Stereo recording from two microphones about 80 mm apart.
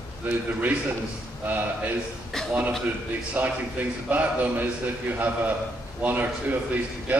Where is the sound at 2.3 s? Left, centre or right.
Centre.